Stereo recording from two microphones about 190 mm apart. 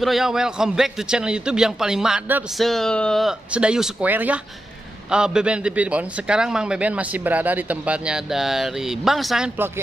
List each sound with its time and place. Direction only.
0.0 s a man's voice: centre (ahead or behind)